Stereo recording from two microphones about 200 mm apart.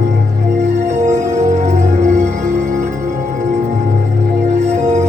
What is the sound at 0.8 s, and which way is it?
Music, 35° right (ahead or behind).